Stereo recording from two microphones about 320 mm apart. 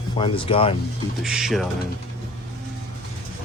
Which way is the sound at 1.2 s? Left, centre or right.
Centre.